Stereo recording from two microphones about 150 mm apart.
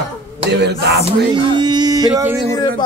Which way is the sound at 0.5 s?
90° right.